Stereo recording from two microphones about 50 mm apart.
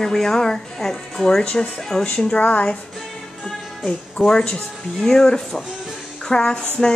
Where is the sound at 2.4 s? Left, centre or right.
Left.